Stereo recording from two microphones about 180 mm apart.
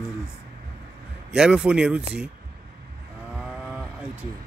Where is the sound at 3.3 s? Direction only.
5° right (ahead or behind).